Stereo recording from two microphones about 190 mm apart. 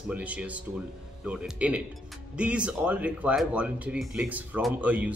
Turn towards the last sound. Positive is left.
turn(degrees=-10)  # may be behind; listen again after turning